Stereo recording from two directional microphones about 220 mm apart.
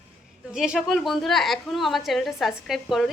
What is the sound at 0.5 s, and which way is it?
Speech, centre (ahead or behind).